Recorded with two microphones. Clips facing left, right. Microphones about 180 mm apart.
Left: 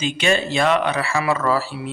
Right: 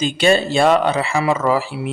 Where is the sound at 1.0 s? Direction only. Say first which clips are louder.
Right 3 dB; 20° right (ahead or behind).